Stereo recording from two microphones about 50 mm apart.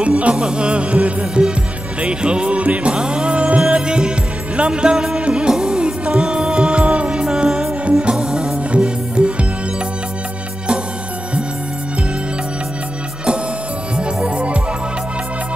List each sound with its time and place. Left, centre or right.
0.0 s speech: right
3.6 s music: centre
13.9 s music: right